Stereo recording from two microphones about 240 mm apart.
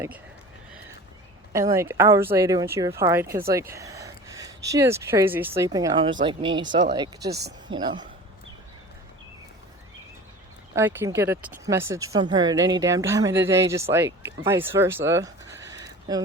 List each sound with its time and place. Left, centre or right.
1.5 s speech: centre
10.8 s speech: centre